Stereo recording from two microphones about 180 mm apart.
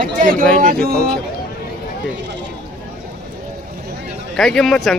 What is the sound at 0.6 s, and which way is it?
Speech, 55° right (ahead or behind).